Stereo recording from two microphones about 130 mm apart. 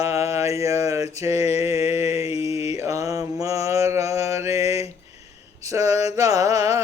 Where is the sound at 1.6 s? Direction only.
20° right (ahead or behind).